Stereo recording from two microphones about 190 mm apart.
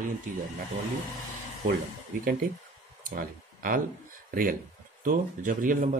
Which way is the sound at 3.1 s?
50° right (ahead or behind).